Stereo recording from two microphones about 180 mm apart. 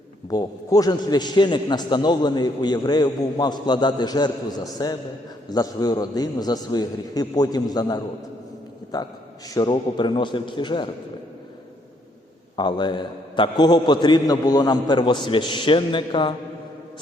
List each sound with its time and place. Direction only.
0.3 s a man's voice: 20° left (ahead or behind)
9.6 s a man's voice: 25° left (ahead or behind)
12.5 s a man's voice: 25° left (ahead or behind)